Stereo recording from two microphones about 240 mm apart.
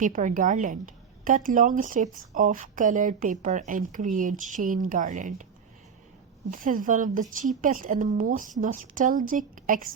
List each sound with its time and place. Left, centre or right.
0.0 s speech: right
6.5 s speech: right